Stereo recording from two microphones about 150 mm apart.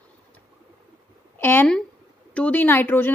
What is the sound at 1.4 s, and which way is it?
Speech, 10° left (ahead or behind).